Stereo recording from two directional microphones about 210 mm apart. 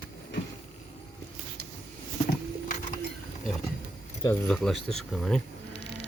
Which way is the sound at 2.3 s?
40° left (ahead or behind).